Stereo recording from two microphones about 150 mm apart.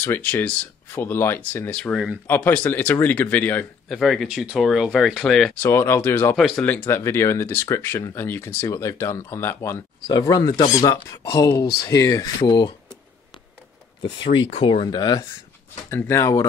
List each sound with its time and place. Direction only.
0.0 s speech: 15° left (ahead or behind)
4.0 s speech: centre (ahead or behind)
5.6 s speech: 15° left (ahead or behind)
11.6 s speech: 90° left
11.9 s speech: 20° left (ahead or behind)
14.2 s speech: 35° left (ahead or behind)
15.9 s speech: 15° left (ahead or behind)